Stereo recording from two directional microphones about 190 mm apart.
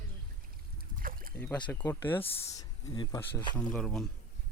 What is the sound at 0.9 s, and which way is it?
Boat, 50° right (ahead or behind).